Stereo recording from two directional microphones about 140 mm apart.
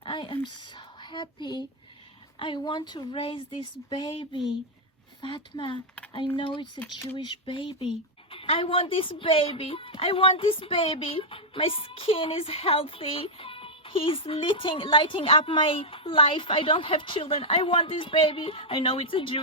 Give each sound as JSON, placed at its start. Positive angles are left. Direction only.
{"t": 0.0, "sound": "a woman's voice", "side_deg": 35}